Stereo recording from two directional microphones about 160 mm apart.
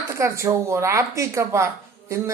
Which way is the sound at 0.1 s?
20° right (ahead or behind).